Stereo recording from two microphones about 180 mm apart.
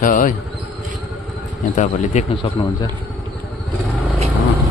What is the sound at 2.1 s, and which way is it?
Speech, 40° left (ahead or behind).